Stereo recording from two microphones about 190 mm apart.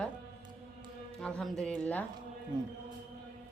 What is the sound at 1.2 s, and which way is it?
Speech, 5° left (ahead or behind).